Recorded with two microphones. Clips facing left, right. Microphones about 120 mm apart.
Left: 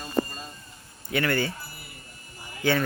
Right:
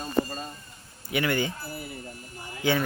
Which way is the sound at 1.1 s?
15° right (ahead or behind).